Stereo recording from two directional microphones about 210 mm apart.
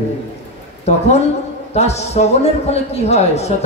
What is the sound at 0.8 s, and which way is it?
A man's voice, 30° left (ahead or behind).